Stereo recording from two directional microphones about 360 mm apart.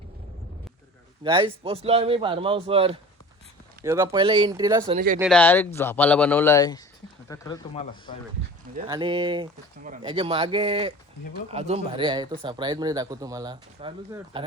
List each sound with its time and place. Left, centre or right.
1.2 s speech: centre
5.2 s speech: centre
8.9 s speech: centre